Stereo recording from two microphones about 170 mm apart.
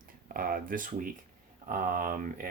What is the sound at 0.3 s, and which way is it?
Speech, 55° right (ahead or behind).